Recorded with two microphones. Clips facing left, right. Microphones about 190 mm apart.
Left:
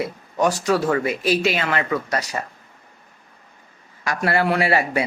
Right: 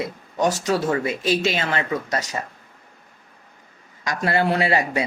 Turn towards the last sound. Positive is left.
turn(degrees=-20)  # may be behind; listen again after turning